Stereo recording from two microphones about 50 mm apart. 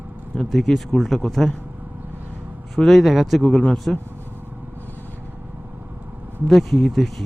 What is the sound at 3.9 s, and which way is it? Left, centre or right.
Speech, centre.